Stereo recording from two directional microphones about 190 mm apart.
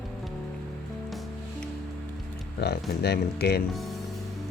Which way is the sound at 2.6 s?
55° left (ahead or behind).